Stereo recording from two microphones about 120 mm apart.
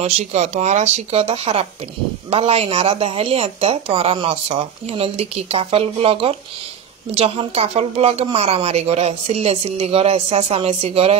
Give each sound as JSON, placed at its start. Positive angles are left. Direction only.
{"t": 0.0, "sound": "speech", "side_deg": -70}